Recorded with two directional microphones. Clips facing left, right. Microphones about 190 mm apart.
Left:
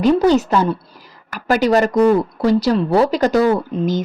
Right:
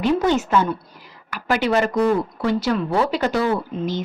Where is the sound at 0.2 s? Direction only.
35° left (ahead or behind).